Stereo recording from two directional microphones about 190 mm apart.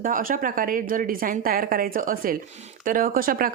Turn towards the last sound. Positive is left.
turn(degrees=-50)  # may be behind; listen again after turning